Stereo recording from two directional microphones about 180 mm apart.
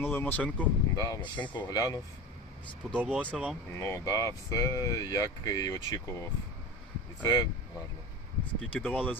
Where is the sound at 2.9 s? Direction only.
5° right (ahead or behind).